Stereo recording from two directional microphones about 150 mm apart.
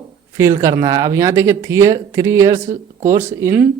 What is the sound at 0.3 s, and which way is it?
A man's voice, 20° right (ahead or behind).